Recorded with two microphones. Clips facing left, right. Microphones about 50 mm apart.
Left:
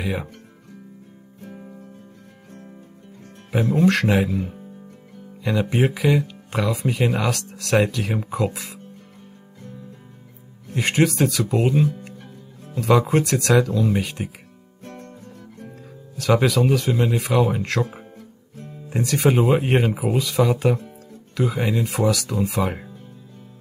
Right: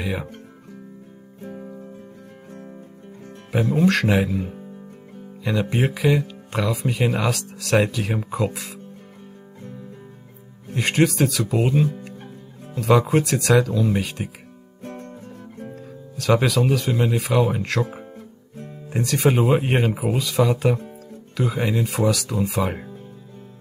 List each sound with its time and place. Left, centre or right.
0.0 s speech: centre
3.7 s speech: centre
5.4 s speech: centre
10.8 s speech: centre
14.8 s music: right
15.7 s speech: centre
18.9 s speech: centre